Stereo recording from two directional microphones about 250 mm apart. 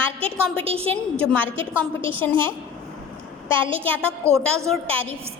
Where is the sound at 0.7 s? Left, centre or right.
Right.